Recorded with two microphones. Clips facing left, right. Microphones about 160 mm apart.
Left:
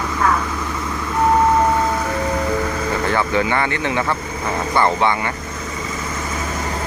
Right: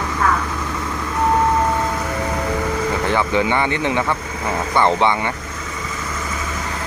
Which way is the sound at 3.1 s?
20° right (ahead or behind).